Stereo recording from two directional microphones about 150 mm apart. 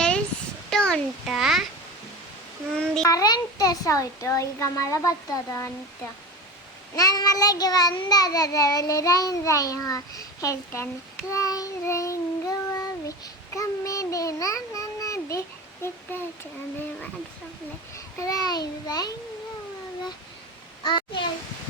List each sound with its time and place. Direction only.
0.7 s a child's voice: 5° left (ahead or behind)
2.7 s a sound: 5° left (ahead or behind)
3.1 s child singing: 25° left (ahead or behind)
6.9 s child singing: 25° left (ahead or behind)
17.9 s a child's voice: 25° left (ahead or behind)
18.9 s child singing: 25° left (ahead or behind)
20.8 s a child's voice: 30° left (ahead or behind)